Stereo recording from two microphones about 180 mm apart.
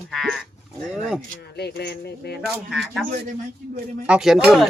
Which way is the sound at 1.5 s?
65° left (ahead or behind).